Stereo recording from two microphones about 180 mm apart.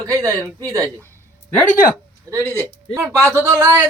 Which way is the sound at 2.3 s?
15° right (ahead or behind).